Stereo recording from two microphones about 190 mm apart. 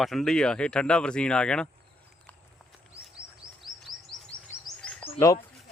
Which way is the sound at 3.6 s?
Centre (ahead or behind).